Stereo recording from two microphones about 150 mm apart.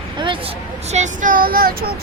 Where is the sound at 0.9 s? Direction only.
55° right (ahead or behind); by 1.7 s 80° right.